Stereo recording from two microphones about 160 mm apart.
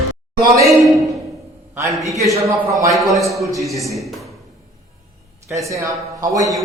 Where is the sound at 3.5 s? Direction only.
20° right (ahead or behind).